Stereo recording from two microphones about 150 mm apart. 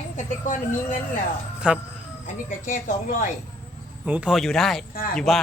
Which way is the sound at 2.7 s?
60° left (ahead or behind).